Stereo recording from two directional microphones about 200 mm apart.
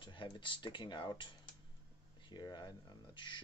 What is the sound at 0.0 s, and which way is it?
Speech, 25° left (ahead or behind).